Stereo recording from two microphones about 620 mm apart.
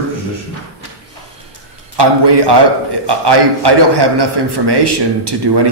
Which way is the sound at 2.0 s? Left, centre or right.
Right.